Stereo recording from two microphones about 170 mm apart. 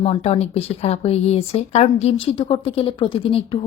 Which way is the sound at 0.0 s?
35° left (ahead or behind).